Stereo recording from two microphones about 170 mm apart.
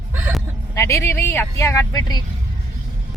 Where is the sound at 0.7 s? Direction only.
15° left (ahead or behind).